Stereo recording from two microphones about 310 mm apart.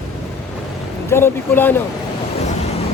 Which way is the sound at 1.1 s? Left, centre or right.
Centre.